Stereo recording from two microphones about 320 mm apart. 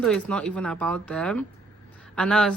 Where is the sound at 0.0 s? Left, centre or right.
Centre.